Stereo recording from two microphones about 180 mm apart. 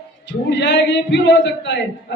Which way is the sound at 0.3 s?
75° left (ahead or behind).